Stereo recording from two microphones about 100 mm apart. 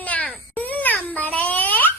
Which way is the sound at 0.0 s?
15° left (ahead or behind).